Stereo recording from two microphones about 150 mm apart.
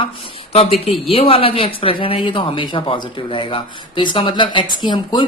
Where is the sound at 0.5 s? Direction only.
40° left (ahead or behind).